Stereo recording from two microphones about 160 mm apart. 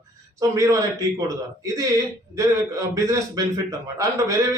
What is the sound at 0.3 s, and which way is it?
A man's voice, 20° right (ahead or behind).